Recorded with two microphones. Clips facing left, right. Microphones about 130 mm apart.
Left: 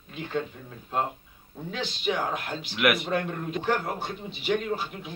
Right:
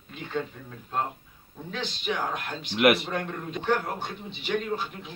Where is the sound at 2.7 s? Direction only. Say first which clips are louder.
Right 4 dB; 30° right (ahead or behind).